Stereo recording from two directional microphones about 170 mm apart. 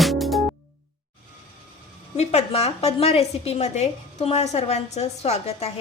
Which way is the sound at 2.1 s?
40° left (ahead or behind).